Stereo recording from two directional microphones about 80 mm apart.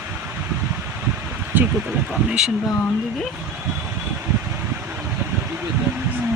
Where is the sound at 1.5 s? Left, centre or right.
Right.